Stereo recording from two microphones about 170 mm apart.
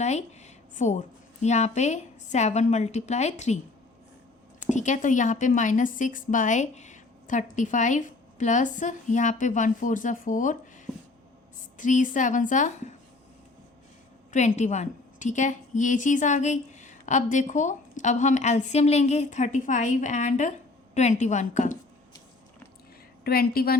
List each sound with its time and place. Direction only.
0.0 s a woman's voice: 40° left (ahead or behind)
4.7 s a woman's voice: 45° left (ahead or behind)
11.8 s a woman's voice: 45° left (ahead or behind)
14.3 s a woman's voice: 45° left (ahead or behind)
23.2 s a woman's voice: 65° left (ahead or behind)